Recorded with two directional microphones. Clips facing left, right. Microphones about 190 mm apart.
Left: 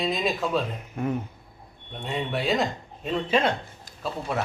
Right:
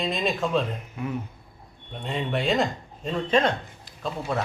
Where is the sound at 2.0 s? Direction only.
Centre (ahead or behind).